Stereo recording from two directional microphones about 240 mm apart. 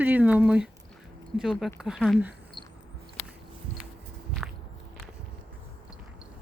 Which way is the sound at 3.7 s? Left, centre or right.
Left.